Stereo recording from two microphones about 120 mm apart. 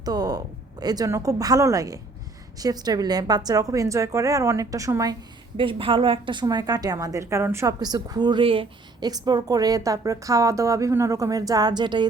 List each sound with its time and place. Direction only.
0.0 s a woman's voice: 35° right (ahead or behind)
5.5 s a woman's voice: 45° right (ahead or behind)
9.0 s a woman's voice: 35° right (ahead or behind)